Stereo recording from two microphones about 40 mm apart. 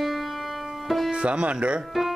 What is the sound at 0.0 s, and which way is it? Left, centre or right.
Music, centre.